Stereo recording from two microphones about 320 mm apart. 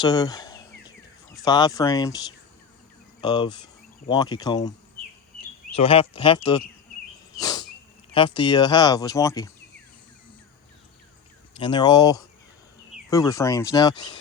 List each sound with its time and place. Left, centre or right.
0.0 s speech: centre
5.7 s speech: centre
7.3 s insect: centre
8.1 s speech: centre
11.5 s speech: centre